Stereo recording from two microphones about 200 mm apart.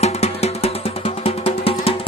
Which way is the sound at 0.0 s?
30° left (ahead or behind).